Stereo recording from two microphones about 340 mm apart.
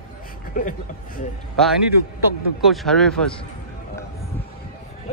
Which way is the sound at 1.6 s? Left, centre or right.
Centre.